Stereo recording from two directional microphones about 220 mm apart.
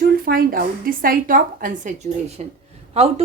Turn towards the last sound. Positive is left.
turn(degrees=-30)  # may be behind; listen again after turning